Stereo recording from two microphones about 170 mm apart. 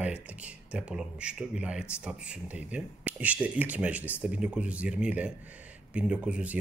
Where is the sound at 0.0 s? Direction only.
10° right (ahead or behind).